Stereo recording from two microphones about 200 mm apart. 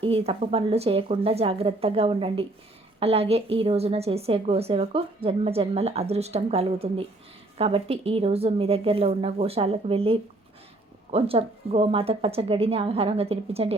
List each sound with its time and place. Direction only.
0.0 s a woman's voice: 30° right (ahead or behind)